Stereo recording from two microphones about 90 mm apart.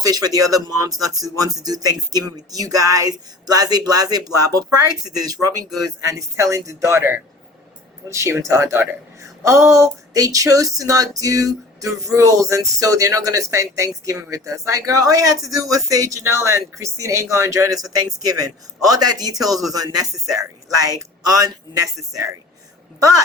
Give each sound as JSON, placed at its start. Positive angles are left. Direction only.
{"t": 0.0, "sound": "speech", "side_deg": -45}